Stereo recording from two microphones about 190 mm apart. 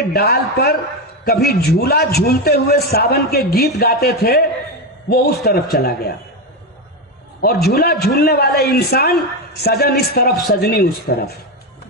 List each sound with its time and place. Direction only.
0.1 s a man's voice: 55° left (ahead or behind)
7.4 s a man's voice: 55° left (ahead or behind)